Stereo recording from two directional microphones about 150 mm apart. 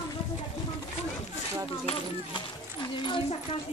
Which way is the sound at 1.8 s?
30° left (ahead or behind).